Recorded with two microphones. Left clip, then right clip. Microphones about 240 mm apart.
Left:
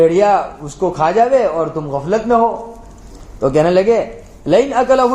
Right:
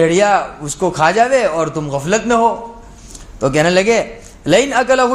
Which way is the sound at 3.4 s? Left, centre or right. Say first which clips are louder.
Left 1 dB; right.